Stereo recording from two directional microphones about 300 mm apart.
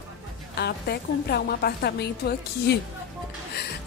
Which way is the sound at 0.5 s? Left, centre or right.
Left.